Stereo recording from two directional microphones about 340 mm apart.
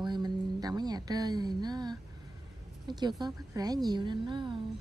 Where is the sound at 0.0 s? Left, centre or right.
Centre.